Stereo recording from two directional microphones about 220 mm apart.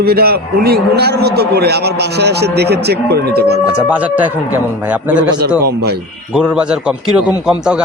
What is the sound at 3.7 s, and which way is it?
Speech, 5° right (ahead or behind).